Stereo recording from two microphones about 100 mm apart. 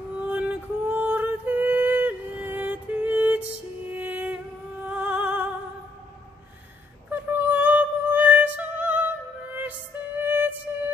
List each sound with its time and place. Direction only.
0.2 s music: 15° right (ahead or behind)
7.1 s music: 20° right (ahead or behind)